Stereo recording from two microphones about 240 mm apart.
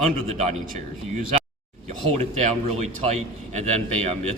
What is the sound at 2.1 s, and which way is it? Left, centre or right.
A man's voice, right.